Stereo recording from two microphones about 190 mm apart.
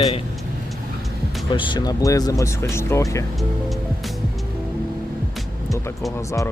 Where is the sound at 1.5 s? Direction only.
25° left (ahead or behind).